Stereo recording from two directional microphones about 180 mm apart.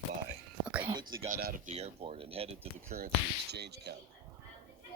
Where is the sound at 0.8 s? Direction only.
25° right (ahead or behind).